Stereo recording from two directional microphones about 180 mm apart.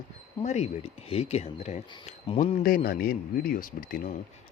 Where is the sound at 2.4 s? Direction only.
50° left (ahead or behind).